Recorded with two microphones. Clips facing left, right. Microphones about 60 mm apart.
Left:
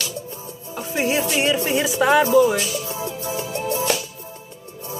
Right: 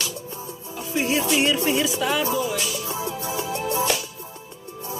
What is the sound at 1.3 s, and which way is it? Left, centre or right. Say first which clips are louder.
Music: left 1 dB; centre.